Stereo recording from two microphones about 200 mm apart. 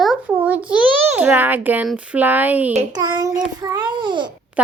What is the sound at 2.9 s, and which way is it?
A child's voice, 20° right (ahead or behind).